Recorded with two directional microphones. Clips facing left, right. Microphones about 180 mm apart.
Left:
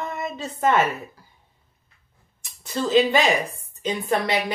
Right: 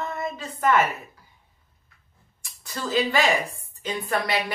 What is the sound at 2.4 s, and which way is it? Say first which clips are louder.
A woman's voice: left 6 dB; 20° left (ahead or behind).